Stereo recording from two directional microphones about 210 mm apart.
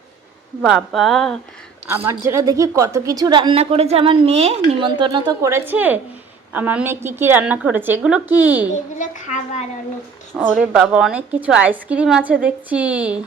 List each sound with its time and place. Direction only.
0.6 s a woman's voice: centre (ahead or behind)
2.0 s a woman's voice: 15° right (ahead or behind)
8.7 s a woman's voice: 35° left (ahead or behind)
10.3 s a woman's voice: 5° right (ahead or behind)